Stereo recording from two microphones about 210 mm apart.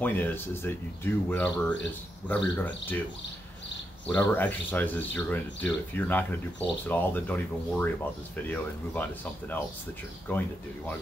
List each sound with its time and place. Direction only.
0.0 s speech: 10° left (ahead or behind)
4.1 s speech: 10° left (ahead or behind)